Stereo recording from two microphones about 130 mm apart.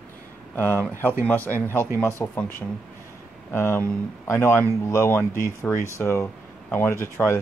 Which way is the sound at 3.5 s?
20° left (ahead or behind).